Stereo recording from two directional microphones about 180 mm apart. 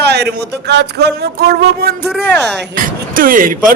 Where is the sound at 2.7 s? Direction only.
50° right (ahead or behind).